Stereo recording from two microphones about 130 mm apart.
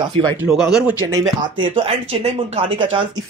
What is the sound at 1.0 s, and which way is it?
Speech, 30° right (ahead or behind).